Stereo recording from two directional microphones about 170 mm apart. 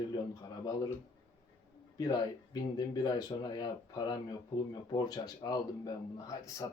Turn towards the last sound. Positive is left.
turn(degrees=20)  # may be behind; listen again after turning